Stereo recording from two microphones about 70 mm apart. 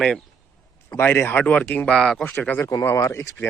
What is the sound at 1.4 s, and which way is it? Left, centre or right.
Speech, centre.